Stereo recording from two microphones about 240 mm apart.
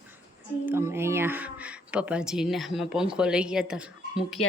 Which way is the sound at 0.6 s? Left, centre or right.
Centre.